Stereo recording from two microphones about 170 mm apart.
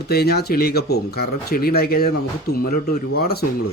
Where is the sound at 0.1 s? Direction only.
70° left (ahead or behind).